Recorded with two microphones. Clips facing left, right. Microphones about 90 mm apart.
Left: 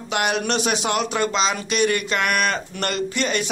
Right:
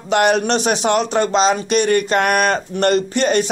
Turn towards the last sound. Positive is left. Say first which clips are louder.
# right 7 dB
turn(degrees=-40)  # may be behind; listen again after turning